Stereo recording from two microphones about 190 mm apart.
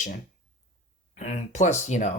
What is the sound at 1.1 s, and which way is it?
Speech, 40° left (ahead or behind).